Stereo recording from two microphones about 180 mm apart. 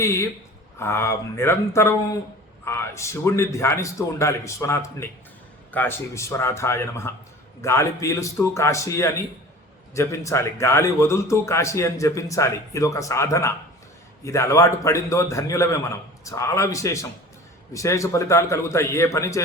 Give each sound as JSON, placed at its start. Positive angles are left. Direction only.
{"t": 0.0, "sound": "a man's voice", "side_deg": 15}